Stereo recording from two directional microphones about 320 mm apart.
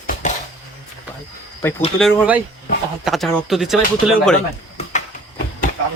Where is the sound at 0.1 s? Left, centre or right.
Left.